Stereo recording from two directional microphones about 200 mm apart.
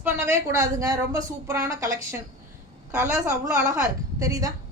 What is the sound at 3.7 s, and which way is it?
Speech, 15° right (ahead or behind).